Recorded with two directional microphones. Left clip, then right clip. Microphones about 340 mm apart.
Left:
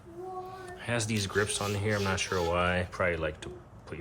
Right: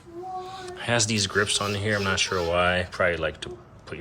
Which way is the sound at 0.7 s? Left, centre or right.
Centre.